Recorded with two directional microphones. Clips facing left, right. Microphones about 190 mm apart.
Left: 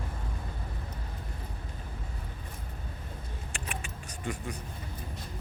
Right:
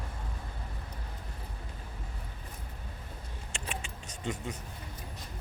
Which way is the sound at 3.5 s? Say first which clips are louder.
Right 1 dB; 25° right (ahead or behind).